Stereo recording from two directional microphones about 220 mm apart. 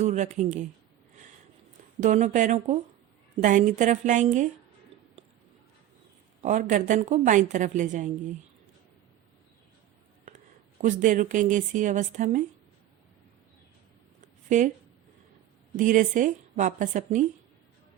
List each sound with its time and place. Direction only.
0.0 s speech: 30° right (ahead or behind)
2.0 s speech: 35° right (ahead or behind)
6.4 s speech: 35° right (ahead or behind)
10.8 s speech: 35° right (ahead or behind)
14.5 s speech: 35° right (ahead or behind)
15.7 s speech: 35° right (ahead or behind)